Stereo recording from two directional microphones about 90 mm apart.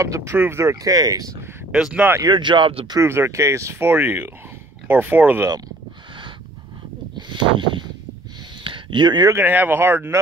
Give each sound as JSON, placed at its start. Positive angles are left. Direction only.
{"t": 0.0, "sound": "speech", "side_deg": -35}
{"t": 0.7, "sound": "speech", "side_deg": -45}
{"t": 1.7, "sound": "speech", "side_deg": -10}
{"t": 2.2, "sound": "speech", "side_deg": -60}
{"t": 3.0, "sound": "speech", "side_deg": -30}
{"t": 3.9, "sound": "speech", "side_deg": -20}
{"t": 7.2, "sound": "a sound", "side_deg": -60}
{"t": 9.3, "sound": "speech", "side_deg": -20}